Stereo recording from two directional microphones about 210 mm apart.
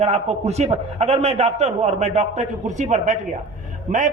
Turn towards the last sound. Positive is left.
turn(degrees=-35)  # may be behind; listen again after turning